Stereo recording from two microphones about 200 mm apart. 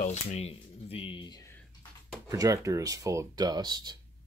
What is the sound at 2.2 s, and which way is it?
Speech, 15° right (ahead or behind).